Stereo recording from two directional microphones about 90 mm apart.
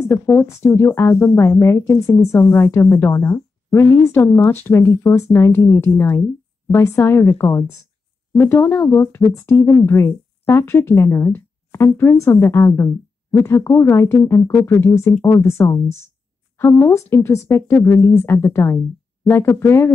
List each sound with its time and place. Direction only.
0.0 s speech: 30° left (ahead or behind)